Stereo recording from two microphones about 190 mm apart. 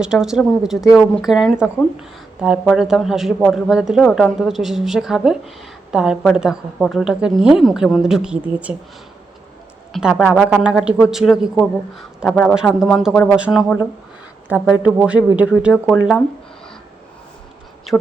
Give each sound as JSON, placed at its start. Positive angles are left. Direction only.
{"t": 0.0, "sound": "speech", "side_deg": -5}
{"t": 9.9, "sound": "speech", "side_deg": 0}
{"t": 14.8, "sound": "speech", "side_deg": -5}